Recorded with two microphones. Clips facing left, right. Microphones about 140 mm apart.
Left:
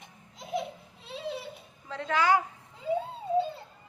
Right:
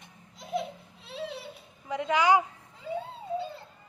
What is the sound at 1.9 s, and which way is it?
Speech, 15° right (ahead or behind).